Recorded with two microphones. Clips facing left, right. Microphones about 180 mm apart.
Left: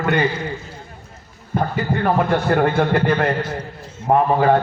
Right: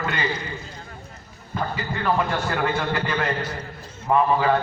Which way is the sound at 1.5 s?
50° left (ahead or behind).